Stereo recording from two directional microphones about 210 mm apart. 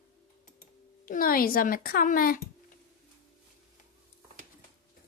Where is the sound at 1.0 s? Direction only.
45° left (ahead or behind).